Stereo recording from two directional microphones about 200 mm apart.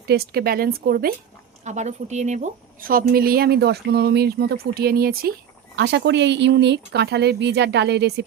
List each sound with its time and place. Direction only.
0.1 s a woman's voice: 50° right (ahead or behind)
1.6 s a woman's voice: 35° right (ahead or behind)
5.7 s speech: 60° right (ahead or behind)